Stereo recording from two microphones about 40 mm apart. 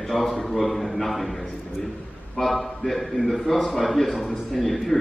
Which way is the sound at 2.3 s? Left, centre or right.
Centre.